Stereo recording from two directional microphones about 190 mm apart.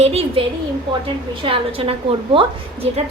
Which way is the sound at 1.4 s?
30° right (ahead or behind).